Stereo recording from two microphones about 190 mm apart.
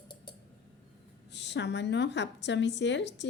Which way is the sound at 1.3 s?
65° left (ahead or behind).